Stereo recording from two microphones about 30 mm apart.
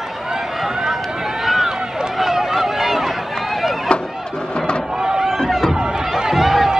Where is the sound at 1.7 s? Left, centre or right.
Right.